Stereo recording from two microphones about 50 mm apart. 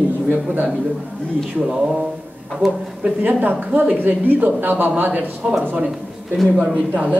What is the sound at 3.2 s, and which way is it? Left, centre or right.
Speech, right.